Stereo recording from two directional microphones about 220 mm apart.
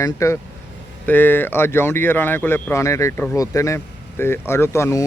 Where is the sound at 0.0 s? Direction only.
15° left (ahead or behind).